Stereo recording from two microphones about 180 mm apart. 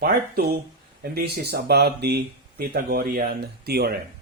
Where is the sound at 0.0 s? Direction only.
55° right (ahead or behind).